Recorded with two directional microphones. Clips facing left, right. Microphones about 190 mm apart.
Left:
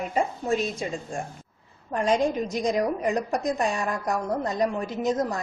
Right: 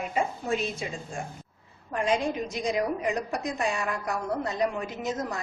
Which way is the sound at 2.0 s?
40° left (ahead or behind).